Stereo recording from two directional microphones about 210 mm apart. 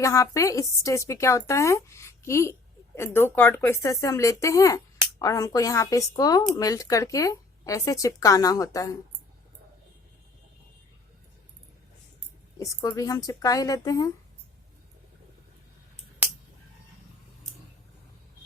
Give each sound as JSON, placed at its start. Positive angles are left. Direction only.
{"t": 0.0, "sound": "a woman's voice", "side_deg": 15}
{"t": 12.5, "sound": "a woman's voice", "side_deg": 15}